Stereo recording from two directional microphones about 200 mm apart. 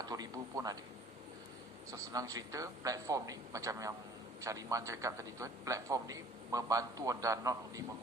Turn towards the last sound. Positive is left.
turn(degrees=-15)  # may be behind; listen again after turning